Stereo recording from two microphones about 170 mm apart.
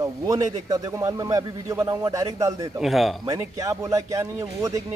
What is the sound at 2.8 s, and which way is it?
Speech, centre (ahead or behind).